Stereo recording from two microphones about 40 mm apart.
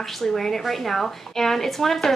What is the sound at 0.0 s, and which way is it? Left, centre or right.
A woman's voice, centre.